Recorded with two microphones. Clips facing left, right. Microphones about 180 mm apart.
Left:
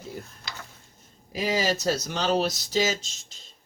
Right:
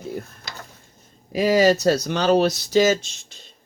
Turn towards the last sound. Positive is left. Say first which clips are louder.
# right 9 dB
turn(degrees=-60)  # may be behind; listen again after turning